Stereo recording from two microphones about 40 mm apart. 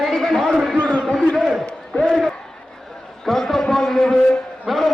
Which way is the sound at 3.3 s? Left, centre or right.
Centre.